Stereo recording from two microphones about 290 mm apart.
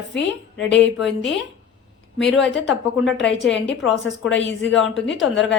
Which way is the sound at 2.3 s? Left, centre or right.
Left.